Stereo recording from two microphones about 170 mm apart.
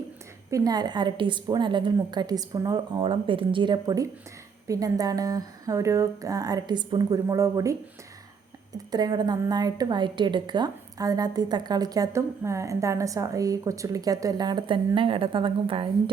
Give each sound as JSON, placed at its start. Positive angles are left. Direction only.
{"t": 0.5, "sound": "a woman's voice", "side_deg": -20}
{"t": 8.9, "sound": "a woman's voice", "side_deg": -25}